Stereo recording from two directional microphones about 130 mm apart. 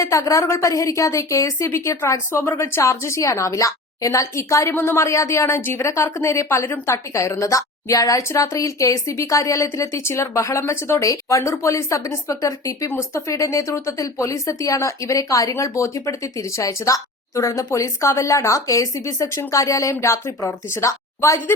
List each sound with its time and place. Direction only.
0.0 s a woman's voice: 25° left (ahead or behind)